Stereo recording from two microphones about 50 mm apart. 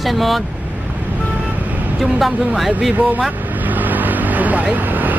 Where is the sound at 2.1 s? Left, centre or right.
Centre.